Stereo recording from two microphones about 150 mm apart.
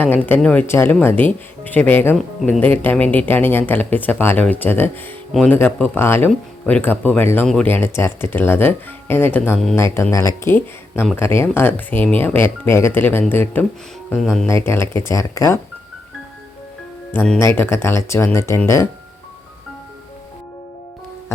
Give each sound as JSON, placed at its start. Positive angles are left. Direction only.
{"t": 0.0, "sound": "speech", "side_deg": 10}
{"t": 14.2, "sound": "speech", "side_deg": 5}
{"t": 14.4, "sound": "speech", "side_deg": 15}
{"t": 17.1, "sound": "speech", "side_deg": 15}